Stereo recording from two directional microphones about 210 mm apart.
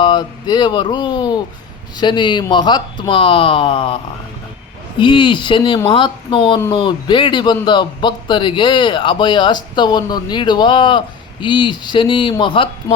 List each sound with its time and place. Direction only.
0.0 s a man's voice: 20° left (ahead or behind)